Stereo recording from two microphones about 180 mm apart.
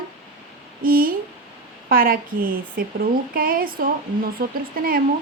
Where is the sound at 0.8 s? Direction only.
55° right (ahead or behind).